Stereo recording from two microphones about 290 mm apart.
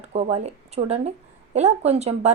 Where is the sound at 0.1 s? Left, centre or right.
Right.